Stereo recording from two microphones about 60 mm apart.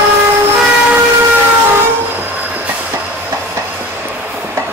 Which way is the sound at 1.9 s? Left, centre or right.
Right.